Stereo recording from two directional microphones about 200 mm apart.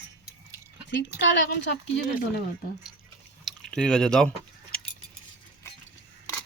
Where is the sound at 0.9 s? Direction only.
65° left (ahead or behind).